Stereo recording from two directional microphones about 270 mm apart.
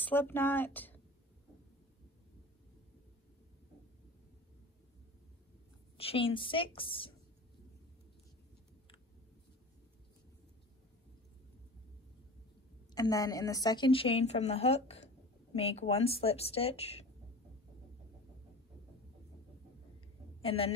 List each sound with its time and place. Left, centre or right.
0.0 s speech: centre
5.9 s a woman's voice: left
12.9 s a woman's voice: centre
20.4 s a woman's voice: left